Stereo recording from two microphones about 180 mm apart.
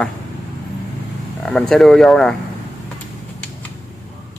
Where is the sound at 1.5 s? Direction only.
Centre (ahead or behind).